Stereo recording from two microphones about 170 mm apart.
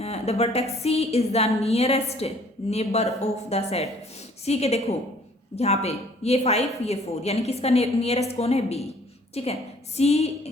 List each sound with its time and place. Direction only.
0.0 s a woman's voice: 40° left (ahead or behind)